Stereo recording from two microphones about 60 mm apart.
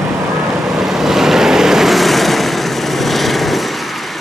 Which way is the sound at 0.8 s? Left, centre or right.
Centre.